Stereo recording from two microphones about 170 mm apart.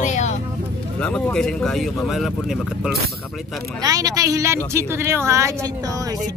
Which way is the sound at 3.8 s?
20° right (ahead or behind).